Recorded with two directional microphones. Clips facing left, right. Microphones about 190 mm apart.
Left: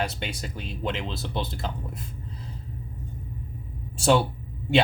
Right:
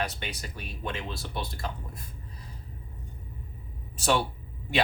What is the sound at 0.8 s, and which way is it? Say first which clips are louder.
Speech: left 5 dB; 25° left (ahead or behind).